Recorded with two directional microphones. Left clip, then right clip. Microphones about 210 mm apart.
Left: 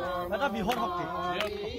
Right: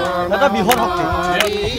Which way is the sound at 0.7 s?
35° right (ahead or behind).